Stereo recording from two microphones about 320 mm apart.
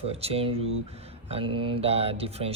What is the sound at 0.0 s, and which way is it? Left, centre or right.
A man's voice, centre.